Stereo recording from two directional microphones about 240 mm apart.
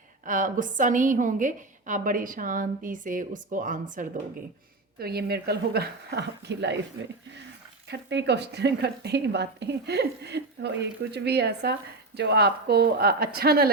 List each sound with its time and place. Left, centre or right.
0.3 s a woman's voice: right
7.9 s a woman's voice: right